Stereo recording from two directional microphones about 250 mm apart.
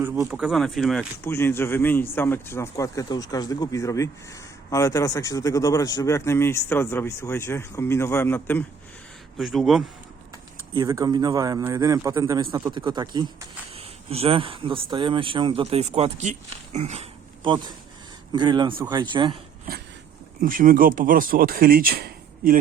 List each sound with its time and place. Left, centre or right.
0.0 s a man's voice: centre
10.8 s a man's voice: centre
20.4 s speech: right